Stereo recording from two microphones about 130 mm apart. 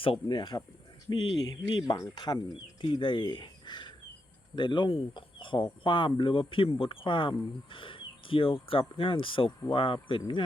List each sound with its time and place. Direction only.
0.0 s speech: 40° left (ahead or behind)